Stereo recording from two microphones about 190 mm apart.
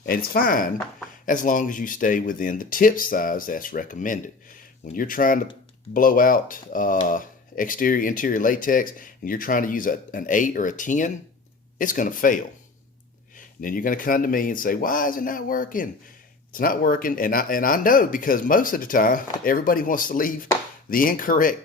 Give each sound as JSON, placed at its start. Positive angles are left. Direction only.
{"t": 0.0, "sound": "speech", "side_deg": 50}